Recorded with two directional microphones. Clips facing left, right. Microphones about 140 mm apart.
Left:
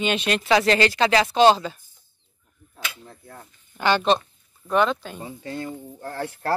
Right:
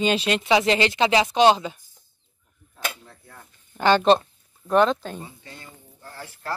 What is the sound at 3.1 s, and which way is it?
Speech, 20° left (ahead or behind).